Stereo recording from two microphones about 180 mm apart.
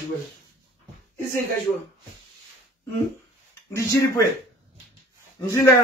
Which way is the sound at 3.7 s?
15° left (ahead or behind).